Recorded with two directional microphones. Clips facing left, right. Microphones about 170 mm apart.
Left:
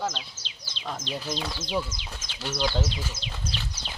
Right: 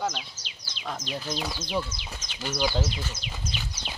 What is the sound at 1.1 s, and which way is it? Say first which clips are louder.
Speech: even; centre (ahead or behind).